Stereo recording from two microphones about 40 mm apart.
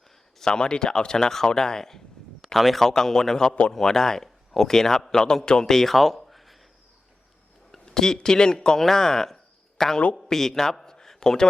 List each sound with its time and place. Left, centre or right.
0.3 s a man's voice: centre
5.6 s a sound: centre
7.9 s a man's voice: centre